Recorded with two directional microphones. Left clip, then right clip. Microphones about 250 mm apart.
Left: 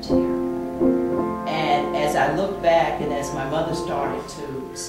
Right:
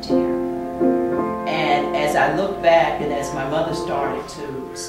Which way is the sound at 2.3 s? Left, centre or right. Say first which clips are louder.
Right 3 dB; centre.